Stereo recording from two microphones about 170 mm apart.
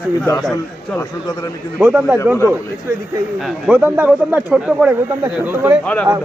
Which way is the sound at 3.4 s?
5° right (ahead or behind).